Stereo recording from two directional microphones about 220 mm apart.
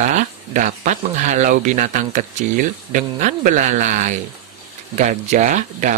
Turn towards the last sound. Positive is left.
turn(degrees=-35)  # may be behind; listen again after turning